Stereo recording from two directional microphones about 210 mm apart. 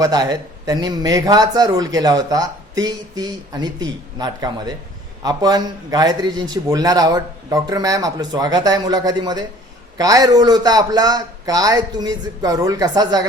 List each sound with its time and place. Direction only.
0.0 s a man's voice: 15° right (ahead or behind)